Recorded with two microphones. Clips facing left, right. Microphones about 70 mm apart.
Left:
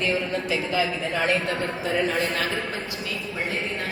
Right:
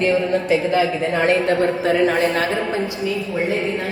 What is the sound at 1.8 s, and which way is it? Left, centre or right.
Speech, right.